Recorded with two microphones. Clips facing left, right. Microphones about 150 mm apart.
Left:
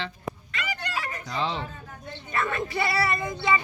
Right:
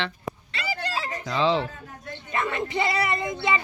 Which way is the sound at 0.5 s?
30° right (ahead or behind).